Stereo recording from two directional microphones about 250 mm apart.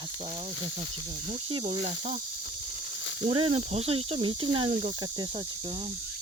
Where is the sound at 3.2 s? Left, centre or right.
Right.